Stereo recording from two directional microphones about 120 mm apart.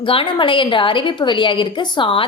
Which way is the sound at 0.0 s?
45° left (ahead or behind).